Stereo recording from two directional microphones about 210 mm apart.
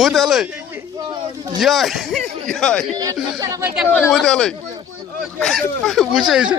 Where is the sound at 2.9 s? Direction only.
15° right (ahead or behind).